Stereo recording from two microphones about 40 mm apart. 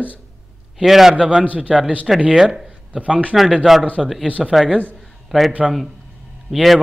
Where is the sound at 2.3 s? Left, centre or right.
Centre.